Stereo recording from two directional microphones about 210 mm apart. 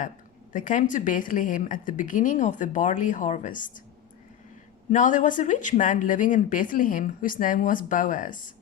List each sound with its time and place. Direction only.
0.5 s speech: 40° left (ahead or behind)
4.9 s speech: 35° left (ahead or behind)